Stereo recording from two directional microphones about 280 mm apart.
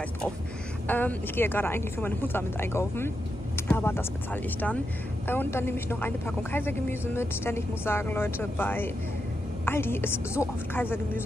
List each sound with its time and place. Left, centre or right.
0.8 s speech: centre